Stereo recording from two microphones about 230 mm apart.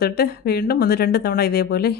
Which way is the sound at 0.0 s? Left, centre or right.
Left.